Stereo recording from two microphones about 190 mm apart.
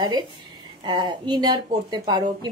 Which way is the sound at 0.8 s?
25° right (ahead or behind).